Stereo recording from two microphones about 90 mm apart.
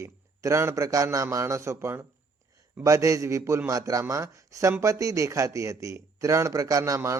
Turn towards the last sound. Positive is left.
turn(degrees=-40)  # may be behind; listen again after turning